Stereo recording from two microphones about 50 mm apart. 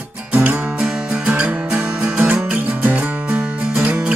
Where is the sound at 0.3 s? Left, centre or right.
Right.